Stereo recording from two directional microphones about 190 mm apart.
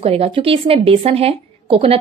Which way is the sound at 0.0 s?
30° right (ahead or behind).